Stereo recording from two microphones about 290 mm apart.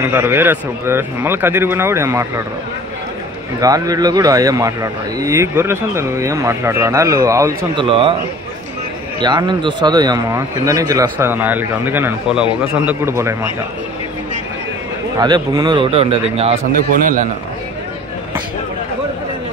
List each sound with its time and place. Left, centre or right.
0.0 s speech: centre
3.6 s speech: centre
9.2 s speech: centre
15.1 s speech: centre